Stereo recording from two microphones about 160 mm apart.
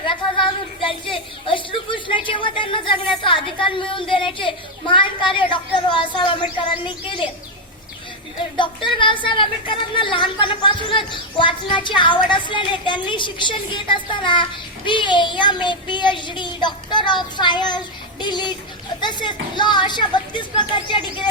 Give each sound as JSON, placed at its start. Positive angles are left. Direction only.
{"t": 0.9, "sound": "a sound", "side_deg": 35}
{"t": 4.1, "sound": "speech", "side_deg": 30}
{"t": 8.5, "sound": "speech", "side_deg": 30}
{"t": 14.8, "sound": "child singing", "side_deg": 30}